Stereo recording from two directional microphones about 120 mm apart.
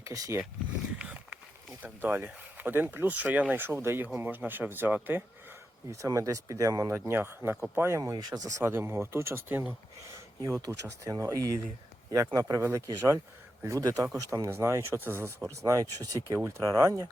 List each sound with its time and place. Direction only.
0.0 s speech: 25° right (ahead or behind)
0.9 s a sound: 10° right (ahead or behind)
1.8 s speech: 15° right (ahead or behind)
5.9 s speech: 25° right (ahead or behind)